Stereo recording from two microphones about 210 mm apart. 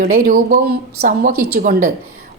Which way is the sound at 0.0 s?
45° right (ahead or behind).